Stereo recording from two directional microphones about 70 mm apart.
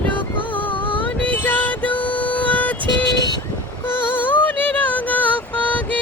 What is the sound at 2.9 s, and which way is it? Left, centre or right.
Vehicle, left.